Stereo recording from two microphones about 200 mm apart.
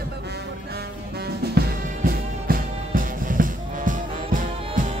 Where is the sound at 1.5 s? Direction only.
50° right (ahead or behind).